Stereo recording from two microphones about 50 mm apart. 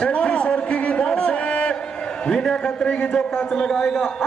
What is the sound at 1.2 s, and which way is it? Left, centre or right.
Music, left.